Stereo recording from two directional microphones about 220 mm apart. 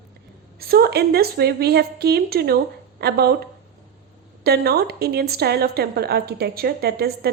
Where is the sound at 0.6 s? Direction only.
45° right (ahead or behind).